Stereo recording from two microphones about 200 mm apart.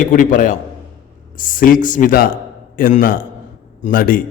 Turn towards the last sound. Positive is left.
turn(degrees=45)  # may be behind; listen again after turning